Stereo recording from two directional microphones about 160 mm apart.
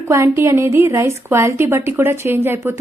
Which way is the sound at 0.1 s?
15° right (ahead or behind).